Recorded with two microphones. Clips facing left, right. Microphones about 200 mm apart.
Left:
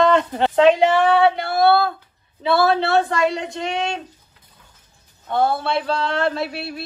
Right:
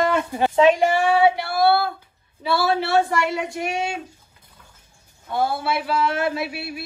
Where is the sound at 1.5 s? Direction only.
25° left (ahead or behind).